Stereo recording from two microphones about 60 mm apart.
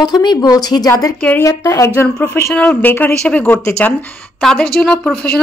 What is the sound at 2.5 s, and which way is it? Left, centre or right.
Speech, left.